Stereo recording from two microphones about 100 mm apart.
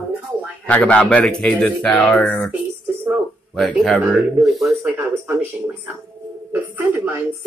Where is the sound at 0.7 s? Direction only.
15° left (ahead or behind).